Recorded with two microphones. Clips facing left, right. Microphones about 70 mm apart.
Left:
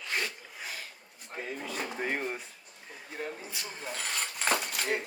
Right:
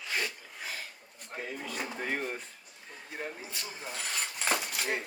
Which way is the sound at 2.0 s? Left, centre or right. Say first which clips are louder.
Left 1 dB; centre.